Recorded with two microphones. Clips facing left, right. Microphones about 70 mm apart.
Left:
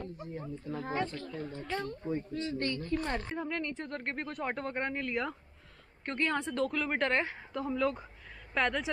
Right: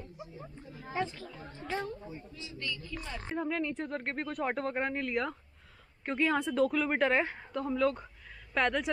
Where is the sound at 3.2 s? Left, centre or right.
Centre.